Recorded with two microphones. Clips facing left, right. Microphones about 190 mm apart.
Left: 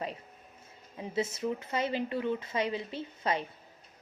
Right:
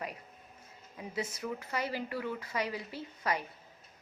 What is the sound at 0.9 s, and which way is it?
A woman's voice, 25° left (ahead or behind).